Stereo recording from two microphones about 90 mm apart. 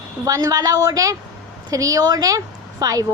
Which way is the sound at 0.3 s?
40° right (ahead or behind).